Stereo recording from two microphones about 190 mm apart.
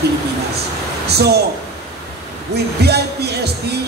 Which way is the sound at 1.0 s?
60° right (ahead or behind).